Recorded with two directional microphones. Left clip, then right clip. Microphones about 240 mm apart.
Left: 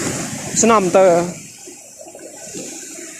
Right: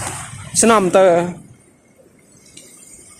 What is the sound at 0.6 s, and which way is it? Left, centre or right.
Speech, centre.